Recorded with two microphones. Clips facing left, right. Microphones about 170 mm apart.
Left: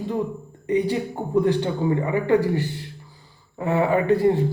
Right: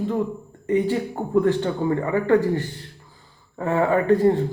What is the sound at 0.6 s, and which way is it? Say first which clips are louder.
A man's voice: right 1 dB; 15° left (ahead or behind).